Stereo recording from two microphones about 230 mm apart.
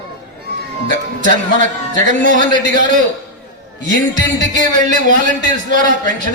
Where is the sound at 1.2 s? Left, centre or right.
Right.